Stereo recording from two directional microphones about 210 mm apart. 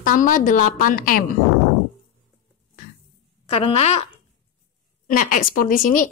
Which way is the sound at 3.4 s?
30° left (ahead or behind).